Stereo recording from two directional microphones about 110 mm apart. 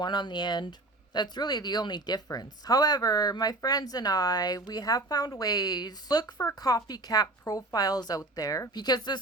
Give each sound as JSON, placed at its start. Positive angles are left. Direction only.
{"t": 0.0, "sound": "speech", "side_deg": 40}